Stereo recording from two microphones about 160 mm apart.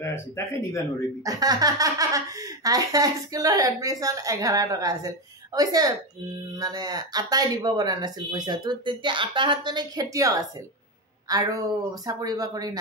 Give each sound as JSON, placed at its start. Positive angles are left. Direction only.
{"t": 0.0, "sound": "speech", "side_deg": 15}
{"t": 1.2, "sound": "speech", "side_deg": -25}